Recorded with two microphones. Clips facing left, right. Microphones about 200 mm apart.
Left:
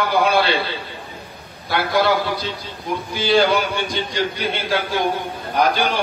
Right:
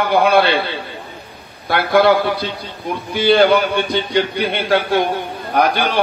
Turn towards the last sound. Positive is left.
turn(degrees=-60)  # may be behind; listen again after turning